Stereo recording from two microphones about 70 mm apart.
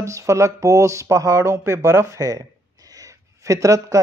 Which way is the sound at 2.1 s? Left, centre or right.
Right.